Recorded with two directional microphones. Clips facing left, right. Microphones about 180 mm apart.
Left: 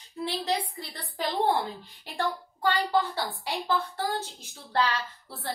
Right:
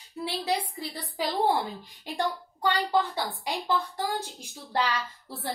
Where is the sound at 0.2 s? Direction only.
10° right (ahead or behind).